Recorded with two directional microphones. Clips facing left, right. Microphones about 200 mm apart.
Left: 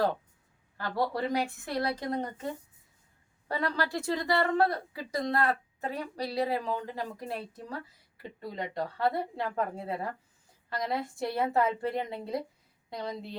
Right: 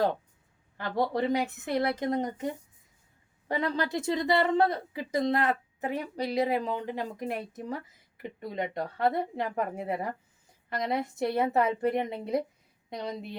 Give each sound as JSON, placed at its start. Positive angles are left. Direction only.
{"t": 0.8, "sound": "a woman's voice", "side_deg": -20}